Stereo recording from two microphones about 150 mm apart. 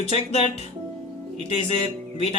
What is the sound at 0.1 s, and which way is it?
Speech, 45° left (ahead or behind).